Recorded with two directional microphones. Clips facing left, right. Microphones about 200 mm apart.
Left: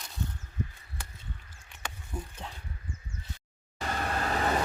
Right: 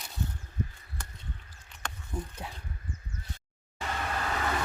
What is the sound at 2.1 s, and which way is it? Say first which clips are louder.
Speech: right 3 dB; 5° left (ahead or behind).